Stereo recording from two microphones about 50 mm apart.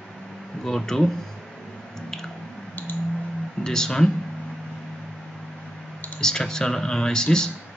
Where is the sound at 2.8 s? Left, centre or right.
Left.